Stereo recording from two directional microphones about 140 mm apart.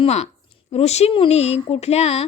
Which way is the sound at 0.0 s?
50° left (ahead or behind).